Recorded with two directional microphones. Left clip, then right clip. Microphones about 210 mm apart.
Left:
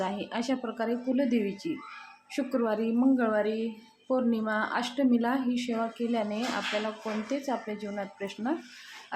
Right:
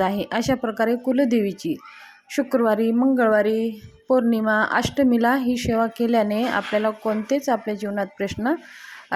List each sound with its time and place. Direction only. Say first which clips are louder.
0.0 s speech: right 10 dB; 40° right (ahead or behind)